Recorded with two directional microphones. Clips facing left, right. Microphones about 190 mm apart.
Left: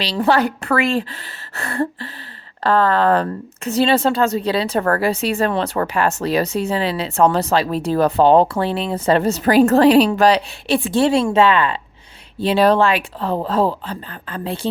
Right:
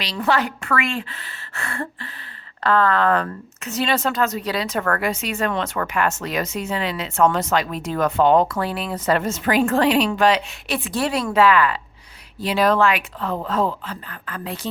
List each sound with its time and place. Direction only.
0.0 s a woman's voice: 30° left (ahead or behind)